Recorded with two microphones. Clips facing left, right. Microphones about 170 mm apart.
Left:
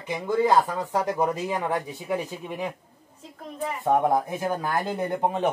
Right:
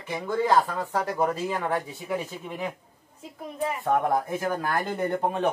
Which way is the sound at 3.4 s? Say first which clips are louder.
Right 2 dB; 10° right (ahead or behind).